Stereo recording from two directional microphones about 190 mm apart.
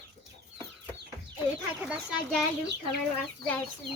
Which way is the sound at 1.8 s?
5° right (ahead or behind).